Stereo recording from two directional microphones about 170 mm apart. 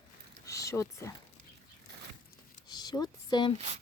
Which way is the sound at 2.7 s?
25° left (ahead or behind).